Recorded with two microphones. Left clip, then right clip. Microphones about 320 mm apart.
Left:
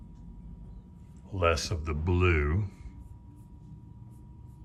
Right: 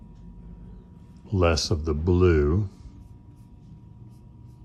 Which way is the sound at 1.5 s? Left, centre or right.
Centre.